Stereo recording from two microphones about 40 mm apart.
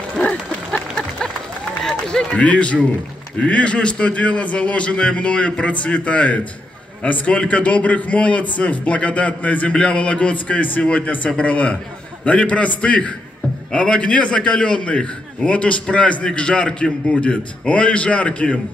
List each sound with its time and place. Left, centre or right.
0.2 s dog: centre
1.8 s run: centre
2.3 s a man's voice: left